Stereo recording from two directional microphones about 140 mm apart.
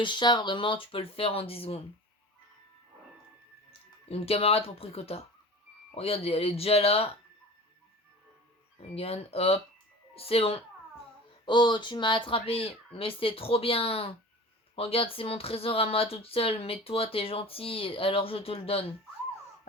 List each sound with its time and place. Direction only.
0.0 s speech: 35° left (ahead or behind)
3.7 s speech: 45° left (ahead or behind)
9.0 s speech: 45° left (ahead or behind)
11.4 s speech: 35° left (ahead or behind)